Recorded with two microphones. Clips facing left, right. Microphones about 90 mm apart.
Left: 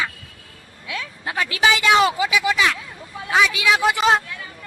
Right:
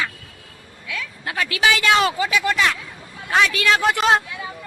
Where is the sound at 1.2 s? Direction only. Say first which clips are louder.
Left 1 dB; 25° left (ahead or behind).